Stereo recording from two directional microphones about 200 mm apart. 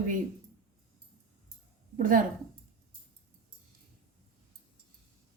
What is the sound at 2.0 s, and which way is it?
Speech, 45° right (ahead or behind).